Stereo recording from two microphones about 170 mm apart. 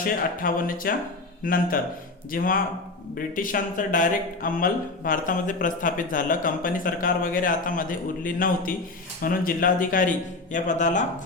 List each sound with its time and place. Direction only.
0.0 s speech: 55° left (ahead or behind)